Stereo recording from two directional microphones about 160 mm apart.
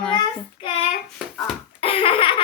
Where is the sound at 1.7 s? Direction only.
35° left (ahead or behind).